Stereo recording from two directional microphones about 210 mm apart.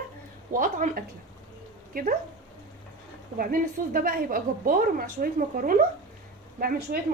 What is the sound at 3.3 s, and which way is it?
A woman's voice, 45° right (ahead or behind).